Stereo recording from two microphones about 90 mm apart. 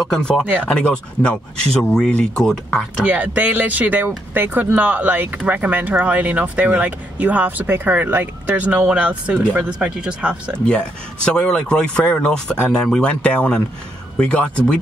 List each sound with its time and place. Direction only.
0.0 s speech: 10° left (ahead or behind)
3.1 s speech: 15° right (ahead or behind)
11.2 s speech: 10° left (ahead or behind)